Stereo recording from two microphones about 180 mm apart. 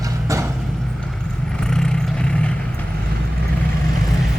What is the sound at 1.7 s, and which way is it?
Vehicle, 5° left (ahead or behind).